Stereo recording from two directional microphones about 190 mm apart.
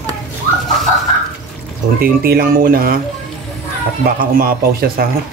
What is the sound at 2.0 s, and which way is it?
Speech, 50° right (ahead or behind).